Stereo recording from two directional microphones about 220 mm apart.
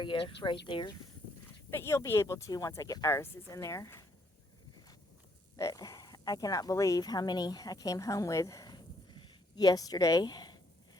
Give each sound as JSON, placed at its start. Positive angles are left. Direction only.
{"t": 0.0, "sound": "speech", "side_deg": 20}
{"t": 5.5, "sound": "speech", "side_deg": 15}